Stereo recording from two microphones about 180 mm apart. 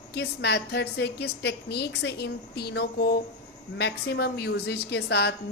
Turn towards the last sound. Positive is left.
turn(degrees=70)  # may be behind; listen again after turning